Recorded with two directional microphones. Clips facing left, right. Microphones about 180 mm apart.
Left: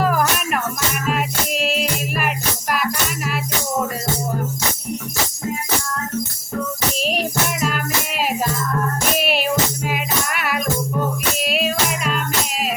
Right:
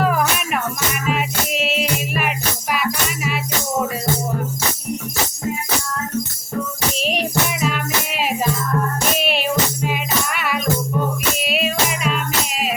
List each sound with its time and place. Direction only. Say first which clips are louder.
0.0 s music: even; centre (ahead or behind)
7.0 s music: right 1 dB; centre (ahead or behind)